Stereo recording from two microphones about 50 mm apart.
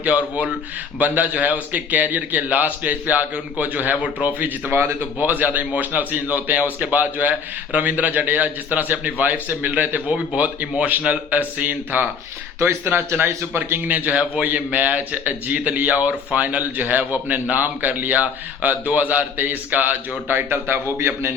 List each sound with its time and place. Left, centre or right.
0.0 s a man's voice: right
4.7 s speech: right
5.2 s a man's voice: right
12.5 s a man's voice: right
13.7 s a man's voice: right
14.1 s speech: right
14.4 s a man's voice: right
20.2 s a man's voice: right